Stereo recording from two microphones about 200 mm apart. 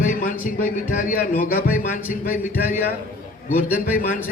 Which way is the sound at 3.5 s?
45° left (ahead or behind).